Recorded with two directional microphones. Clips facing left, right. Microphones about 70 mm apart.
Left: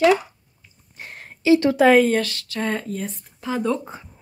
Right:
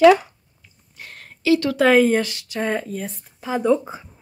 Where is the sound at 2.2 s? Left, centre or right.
Centre.